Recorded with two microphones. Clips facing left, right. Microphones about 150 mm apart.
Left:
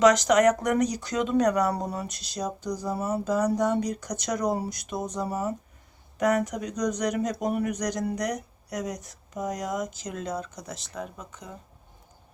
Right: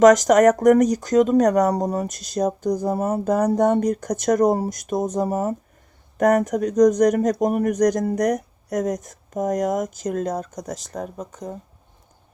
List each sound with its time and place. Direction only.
0.0 s speech: 45° right (ahead or behind)